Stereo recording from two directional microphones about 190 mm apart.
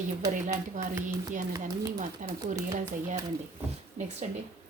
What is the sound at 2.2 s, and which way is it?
Speech, 40° right (ahead or behind).